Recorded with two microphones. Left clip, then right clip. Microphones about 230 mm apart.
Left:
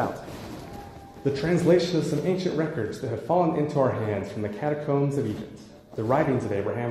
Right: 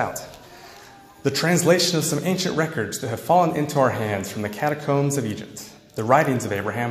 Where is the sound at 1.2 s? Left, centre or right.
Right.